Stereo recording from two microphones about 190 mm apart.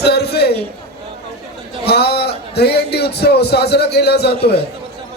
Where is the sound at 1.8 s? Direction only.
60° left (ahead or behind).